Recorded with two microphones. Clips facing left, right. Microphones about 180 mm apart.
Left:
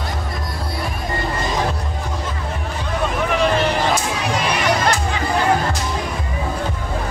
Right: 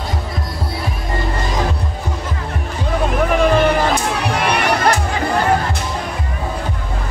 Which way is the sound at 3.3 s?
55° right (ahead or behind).